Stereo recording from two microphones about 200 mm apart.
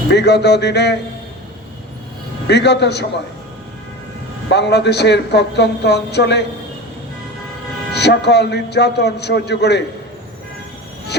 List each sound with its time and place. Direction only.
0.1 s a woman's voice: 60° left (ahead or behind)
2.5 s a woman's voice: 60° left (ahead or behind)
4.5 s a woman's voice: 60° left (ahead or behind)
7.9 s a woman's voice: 55° left (ahead or behind)